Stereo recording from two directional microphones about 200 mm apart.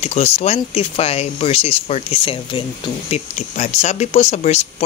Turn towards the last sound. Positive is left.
turn(degrees=35)  # may be behind; listen again after turning